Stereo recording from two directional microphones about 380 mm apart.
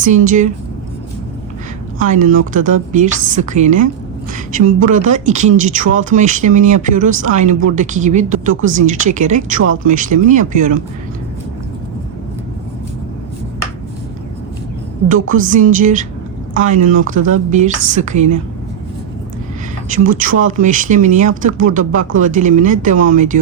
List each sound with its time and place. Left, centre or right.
0.0 s speech: centre
2.0 s speech: right
15.1 s speech: right
20.1 s speech: right